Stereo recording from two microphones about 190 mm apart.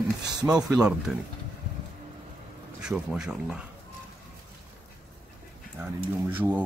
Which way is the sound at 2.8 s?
5° right (ahead or behind).